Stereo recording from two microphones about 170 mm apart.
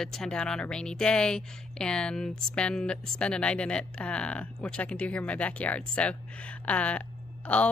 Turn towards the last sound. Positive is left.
turn(degrees=10)  # may be behind; listen again after turning